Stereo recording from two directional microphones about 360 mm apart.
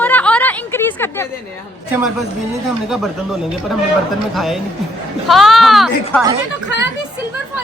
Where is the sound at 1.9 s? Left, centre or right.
Centre.